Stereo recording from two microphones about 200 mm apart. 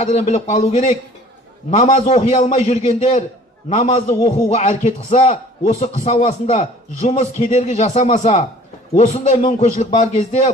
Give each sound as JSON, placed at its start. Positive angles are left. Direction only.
{"t": 0.0, "sound": "a man's voice", "side_deg": 35}